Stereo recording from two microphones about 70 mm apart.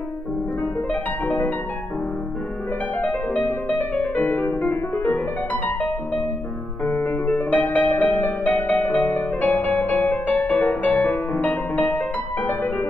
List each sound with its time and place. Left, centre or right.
1.2 s music: left
3.0 s music: left
6.9 s music: left
7.2 s music: left